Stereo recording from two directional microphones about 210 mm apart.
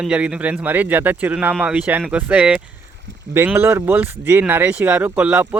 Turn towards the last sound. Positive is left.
turn(degrees=-5)  # may be behind; listen again after turning